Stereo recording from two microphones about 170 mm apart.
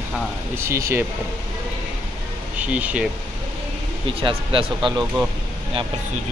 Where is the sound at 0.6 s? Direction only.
15° right (ahead or behind).